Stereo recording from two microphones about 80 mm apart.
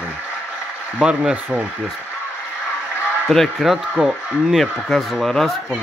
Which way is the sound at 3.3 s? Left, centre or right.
Centre.